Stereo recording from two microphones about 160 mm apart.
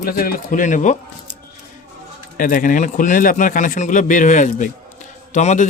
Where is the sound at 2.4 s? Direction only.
55° left (ahead or behind).